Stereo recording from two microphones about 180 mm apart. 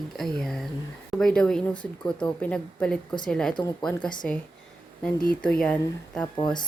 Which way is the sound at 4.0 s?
25° left (ahead or behind).